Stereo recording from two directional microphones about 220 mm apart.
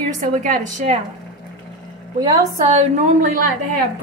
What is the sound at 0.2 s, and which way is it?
Speech, 35° right (ahead or behind).